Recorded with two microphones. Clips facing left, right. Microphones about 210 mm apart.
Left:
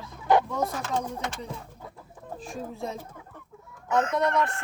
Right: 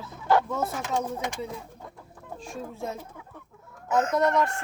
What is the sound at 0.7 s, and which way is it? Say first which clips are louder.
Speech: right 1 dB; 15° right (ahead or behind).